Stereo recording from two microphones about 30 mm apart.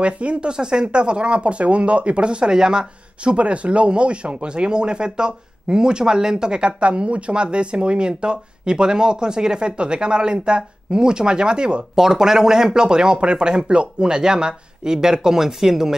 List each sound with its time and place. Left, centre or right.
0.0 s speech: right
0.5 s speech: right
2.5 s speech: right
3.3 s speech: right
11.9 s speech: centre